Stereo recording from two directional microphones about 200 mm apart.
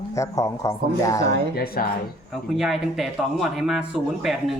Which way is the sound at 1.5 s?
50° left (ahead or behind).